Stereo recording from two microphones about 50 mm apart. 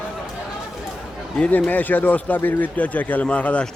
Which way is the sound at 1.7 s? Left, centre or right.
Left.